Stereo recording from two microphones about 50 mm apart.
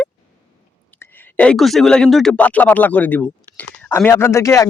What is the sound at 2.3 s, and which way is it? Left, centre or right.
Speech, left.